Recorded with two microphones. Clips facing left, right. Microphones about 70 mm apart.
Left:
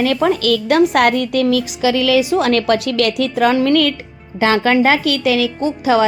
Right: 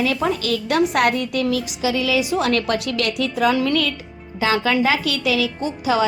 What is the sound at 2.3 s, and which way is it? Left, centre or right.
A woman's voice, left.